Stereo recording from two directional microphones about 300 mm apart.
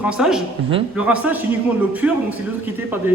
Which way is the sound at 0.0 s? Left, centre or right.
Centre.